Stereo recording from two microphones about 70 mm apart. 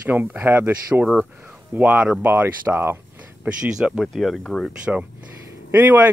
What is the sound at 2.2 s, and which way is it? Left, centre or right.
Speech, right.